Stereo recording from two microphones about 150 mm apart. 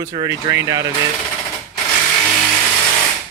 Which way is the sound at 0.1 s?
30° right (ahead or behind).